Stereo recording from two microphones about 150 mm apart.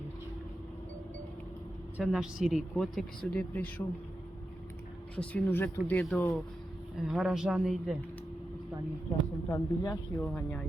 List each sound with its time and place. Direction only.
2.0 s speech: 5° right (ahead or behind)
5.1 s speech: 10° left (ahead or behind)
7.0 s speech: 5° right (ahead or behind)
9.5 s speech: 20° left (ahead or behind)
10.2 s speech: 10° left (ahead or behind)